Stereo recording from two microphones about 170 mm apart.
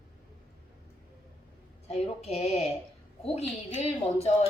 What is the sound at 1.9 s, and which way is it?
A woman's voice, 40° left (ahead or behind).